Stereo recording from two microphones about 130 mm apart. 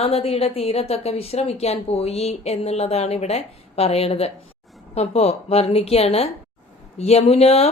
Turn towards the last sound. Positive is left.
turn(degrees=55)  # may be behind; listen again after turning